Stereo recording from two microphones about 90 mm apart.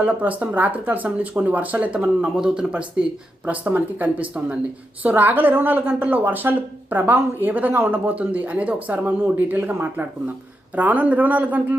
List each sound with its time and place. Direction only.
0.0 s a woman's voice: 15° right (ahead or behind)